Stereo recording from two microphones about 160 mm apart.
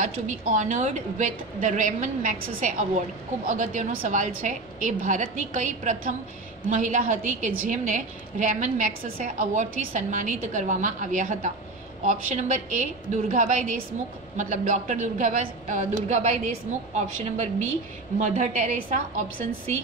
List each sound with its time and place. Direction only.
0.0 s a woman's voice: 50° right (ahead or behind)